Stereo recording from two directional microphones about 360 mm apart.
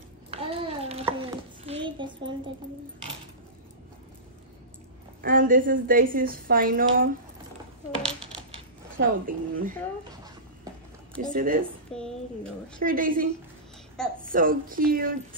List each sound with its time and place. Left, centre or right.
0.3 s a sound: centre
1.9 s a woman's voice: centre
5.2 s a woman's voice: right
8.9 s a woman's voice: right
11.3 s a woman's voice: right
11.9 s speech: centre
12.8 s a woman's voice: right